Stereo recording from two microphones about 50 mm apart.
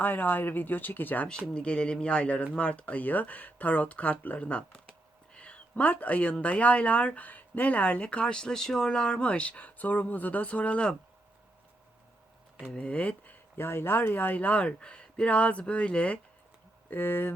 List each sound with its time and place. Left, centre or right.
0.0 s speech: left
1.3 s speech: centre
4.7 s a sound: left
6.4 s speech: left
12.7 s speech: left
13.6 s speech: left
14.3 s speech: left
16.9 s speech: left